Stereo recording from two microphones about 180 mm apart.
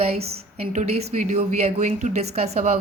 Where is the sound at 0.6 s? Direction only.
40° right (ahead or behind).